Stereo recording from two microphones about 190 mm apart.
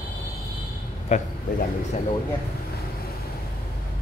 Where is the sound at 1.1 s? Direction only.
40° left (ahead or behind).